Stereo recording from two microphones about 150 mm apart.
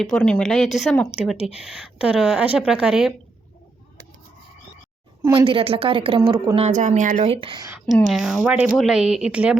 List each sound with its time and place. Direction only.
0.0 s speech: 5° left (ahead or behind)
5.5 s speech: 40° right (ahead or behind)
6.6 s speech: 50° right (ahead or behind)
7.9 s speech: centre (ahead or behind)